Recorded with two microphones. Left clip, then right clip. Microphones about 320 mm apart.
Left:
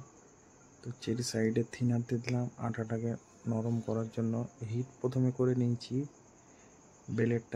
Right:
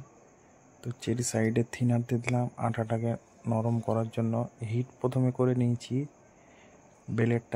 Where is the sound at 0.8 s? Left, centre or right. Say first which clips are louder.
Right 4 dB; centre.